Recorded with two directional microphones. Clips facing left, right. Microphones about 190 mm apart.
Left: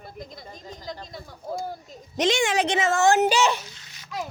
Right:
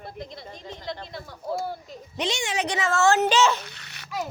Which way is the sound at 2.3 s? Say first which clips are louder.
Left 8 dB; 55° left (ahead or behind).